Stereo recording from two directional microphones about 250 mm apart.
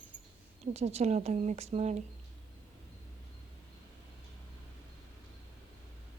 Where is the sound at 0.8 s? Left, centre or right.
Right.